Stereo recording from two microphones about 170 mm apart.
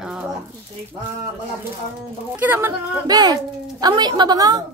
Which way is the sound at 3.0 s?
25° right (ahead or behind).